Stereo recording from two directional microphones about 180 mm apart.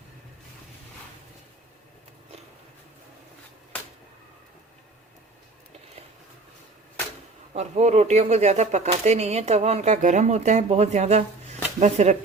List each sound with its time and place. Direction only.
7.5 s speech: 40° right (ahead or behind)